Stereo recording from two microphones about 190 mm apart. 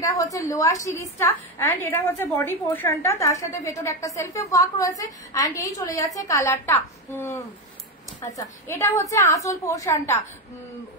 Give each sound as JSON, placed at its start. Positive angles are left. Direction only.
{"t": 0.5, "sound": "a woman's voice", "side_deg": 15}